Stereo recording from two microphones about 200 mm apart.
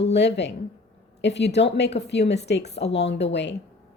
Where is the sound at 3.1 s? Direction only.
60° left (ahead or behind).